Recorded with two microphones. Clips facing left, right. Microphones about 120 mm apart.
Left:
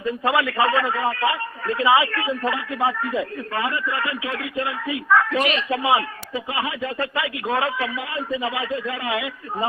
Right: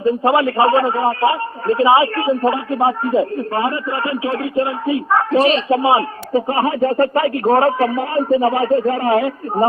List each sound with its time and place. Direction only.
0.0 s a man's voice: 35° right (ahead or behind)